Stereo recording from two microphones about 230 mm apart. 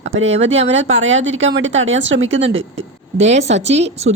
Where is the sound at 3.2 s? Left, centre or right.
Right.